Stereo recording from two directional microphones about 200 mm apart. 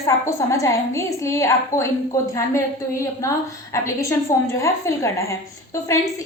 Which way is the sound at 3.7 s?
15° left (ahead or behind).